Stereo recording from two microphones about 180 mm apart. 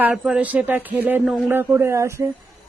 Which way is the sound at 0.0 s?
5° right (ahead or behind).